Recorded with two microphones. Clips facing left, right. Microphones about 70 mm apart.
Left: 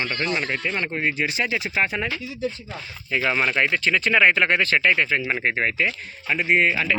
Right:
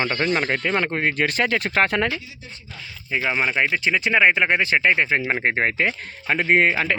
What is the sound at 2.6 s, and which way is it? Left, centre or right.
Speech, left.